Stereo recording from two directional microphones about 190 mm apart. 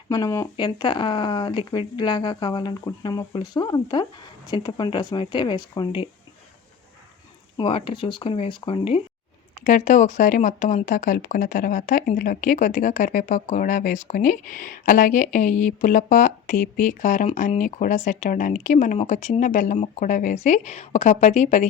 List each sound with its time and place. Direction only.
0.1 s speech: 20° left (ahead or behind)
7.5 s speech: 30° left (ahead or behind)
9.6 s speech: 40° left (ahead or behind)